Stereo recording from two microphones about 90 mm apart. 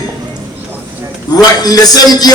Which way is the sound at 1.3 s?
45° left (ahead or behind).